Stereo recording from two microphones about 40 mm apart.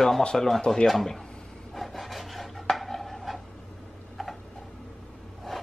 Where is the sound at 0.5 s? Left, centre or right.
Centre.